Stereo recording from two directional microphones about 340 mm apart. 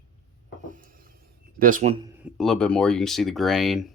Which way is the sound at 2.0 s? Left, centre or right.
Centre.